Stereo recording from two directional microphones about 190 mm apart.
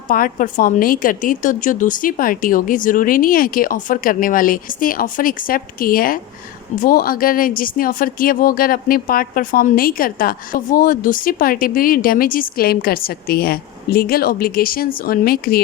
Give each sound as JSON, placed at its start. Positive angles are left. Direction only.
{"t": 0.1, "sound": "speech", "side_deg": 45}